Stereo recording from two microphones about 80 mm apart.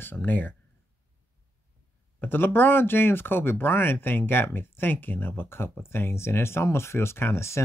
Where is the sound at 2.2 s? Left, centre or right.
Left.